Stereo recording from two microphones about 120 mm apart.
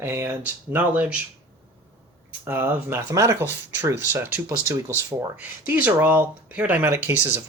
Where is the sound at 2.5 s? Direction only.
20° right (ahead or behind).